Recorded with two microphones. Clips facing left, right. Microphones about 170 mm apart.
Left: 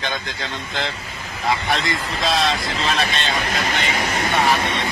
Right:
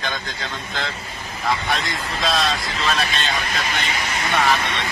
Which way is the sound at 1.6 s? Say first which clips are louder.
Left 2 dB; 25° left (ahead or behind).